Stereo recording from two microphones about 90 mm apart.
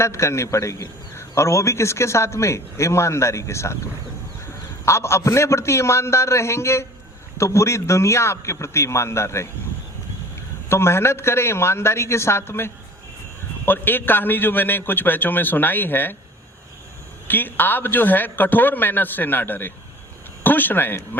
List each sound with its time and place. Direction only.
0.0 s a man's voice: 30° left (ahead or behind)
4.9 s a man's voice: 30° left (ahead or behind)
10.7 s a man's voice: 30° left (ahead or behind)
17.2 s a man's voice: 20° left (ahead or behind)